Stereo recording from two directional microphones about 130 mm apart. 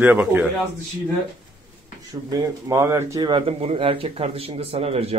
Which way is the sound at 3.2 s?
40° right (ahead or behind).